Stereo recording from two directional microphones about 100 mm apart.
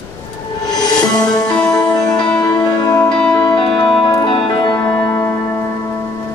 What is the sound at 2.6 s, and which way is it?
Music, 40° left (ahead or behind).